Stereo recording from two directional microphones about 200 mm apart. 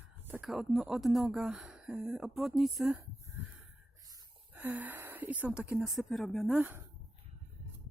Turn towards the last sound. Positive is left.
turn(degrees=-5)  # may be behind; listen again after turning